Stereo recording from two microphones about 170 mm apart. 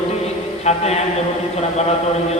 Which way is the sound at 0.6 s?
40° left (ahead or behind).